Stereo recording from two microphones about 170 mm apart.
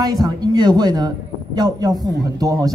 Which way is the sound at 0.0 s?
20° right (ahead or behind).